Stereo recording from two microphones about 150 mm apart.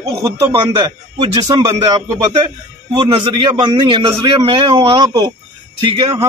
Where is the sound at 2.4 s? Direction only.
35° right (ahead or behind).